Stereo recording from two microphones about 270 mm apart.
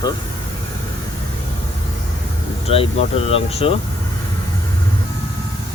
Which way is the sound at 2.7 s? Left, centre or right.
Left.